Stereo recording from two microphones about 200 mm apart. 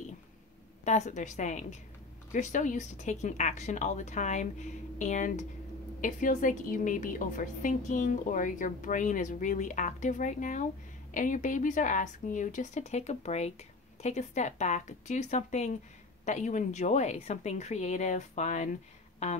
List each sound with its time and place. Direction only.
0.8 s a woman's voice: 35° left (ahead or behind)